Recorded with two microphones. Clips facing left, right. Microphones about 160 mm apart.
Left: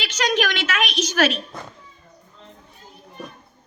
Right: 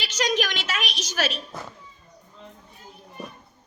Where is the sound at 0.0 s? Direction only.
60° left (ahead or behind).